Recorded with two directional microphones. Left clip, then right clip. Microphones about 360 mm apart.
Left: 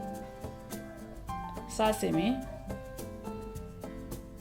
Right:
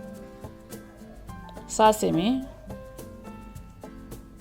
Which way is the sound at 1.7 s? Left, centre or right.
Centre.